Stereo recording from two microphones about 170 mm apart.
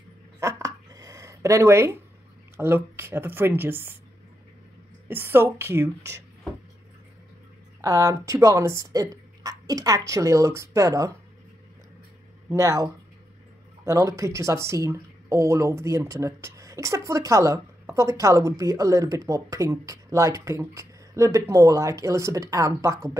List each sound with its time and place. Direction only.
0.4 s a sound: 20° right (ahead or behind)
2.5 s speech: 15° right (ahead or behind)
5.0 s speech: 15° right (ahead or behind)
7.8 s speech: 20° right (ahead or behind)
12.4 s speech: 20° right (ahead or behind)